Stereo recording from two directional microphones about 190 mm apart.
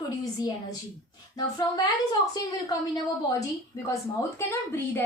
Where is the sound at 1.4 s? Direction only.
20° left (ahead or behind).